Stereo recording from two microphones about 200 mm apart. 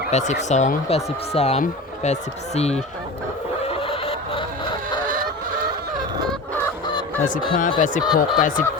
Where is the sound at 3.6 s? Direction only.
30° left (ahead or behind).